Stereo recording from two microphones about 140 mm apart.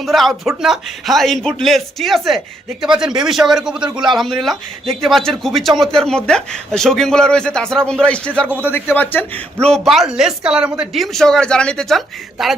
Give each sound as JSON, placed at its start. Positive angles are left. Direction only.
{"t": 0.0, "sound": "speech", "side_deg": 0}
{"t": 3.8, "sound": "a man's voice", "side_deg": -30}
{"t": 4.1, "sound": "speech", "side_deg": 0}